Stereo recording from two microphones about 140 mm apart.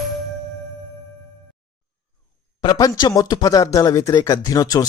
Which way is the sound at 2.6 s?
30° left (ahead or behind).